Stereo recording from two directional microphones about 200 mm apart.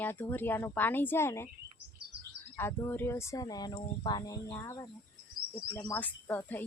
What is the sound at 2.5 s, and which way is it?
Speech, 10° left (ahead or behind).